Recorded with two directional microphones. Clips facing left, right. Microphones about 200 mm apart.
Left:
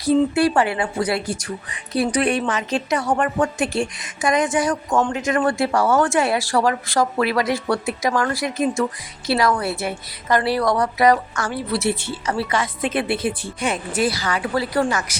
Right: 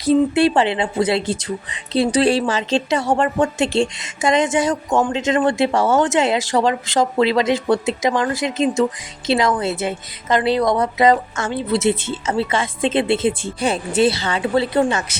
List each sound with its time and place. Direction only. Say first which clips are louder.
0.0 s speech: right 2 dB; 25° right (ahead or behind)